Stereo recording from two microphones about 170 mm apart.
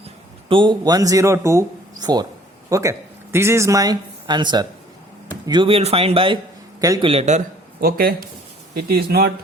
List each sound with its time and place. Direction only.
0.4 s a man's voice: 30° right (ahead or behind)
6.8 s speech: 20° right (ahead or behind)
7.1 s speech: 40° right (ahead or behind)
7.8 s speech: 60° right (ahead or behind)